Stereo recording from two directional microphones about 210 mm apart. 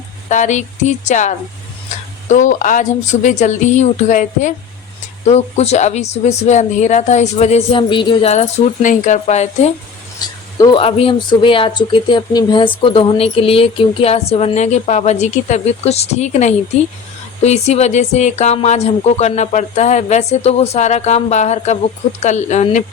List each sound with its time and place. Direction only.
0.3 s speech: 35° left (ahead or behind)
10.2 s speech: 20° left (ahead or behind)